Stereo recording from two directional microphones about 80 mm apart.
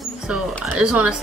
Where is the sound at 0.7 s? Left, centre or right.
Centre.